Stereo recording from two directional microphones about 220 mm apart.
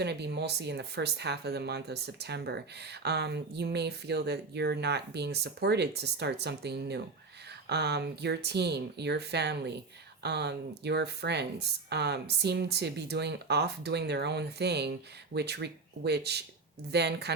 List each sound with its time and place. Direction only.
0.0 s speech: 50° right (ahead or behind)